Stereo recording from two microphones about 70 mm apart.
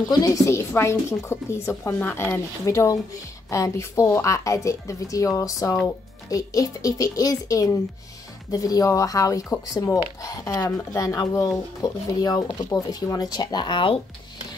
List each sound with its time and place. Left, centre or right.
0.1 s speech: left
0.5 s a woman's voice: left
13.2 s speech: left